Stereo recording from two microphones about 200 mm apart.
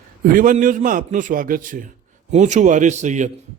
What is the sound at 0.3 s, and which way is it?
A man's voice, 40° right (ahead or behind).